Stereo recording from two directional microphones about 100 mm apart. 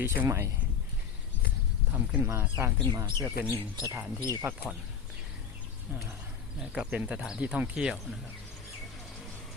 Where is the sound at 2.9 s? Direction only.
35° right (ahead or behind).